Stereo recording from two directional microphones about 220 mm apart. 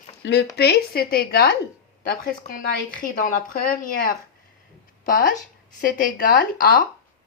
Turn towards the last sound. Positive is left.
turn(degrees=40)  # may be behind; listen again after turning